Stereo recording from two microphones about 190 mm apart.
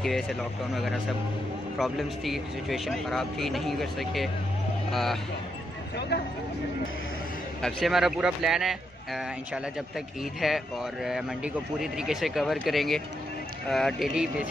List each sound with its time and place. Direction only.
0.0 s speech: centre (ahead or behind)
5.9 s speech: 60° left (ahead or behind)
7.6 s speech: centre (ahead or behind)